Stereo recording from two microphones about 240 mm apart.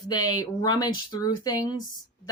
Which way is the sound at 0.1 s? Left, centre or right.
Centre.